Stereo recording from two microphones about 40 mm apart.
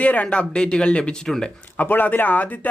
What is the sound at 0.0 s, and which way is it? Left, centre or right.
Speech, left.